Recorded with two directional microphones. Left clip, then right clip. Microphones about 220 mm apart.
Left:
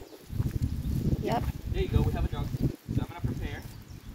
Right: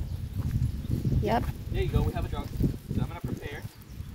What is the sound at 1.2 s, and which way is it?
Speech, 20° right (ahead or behind).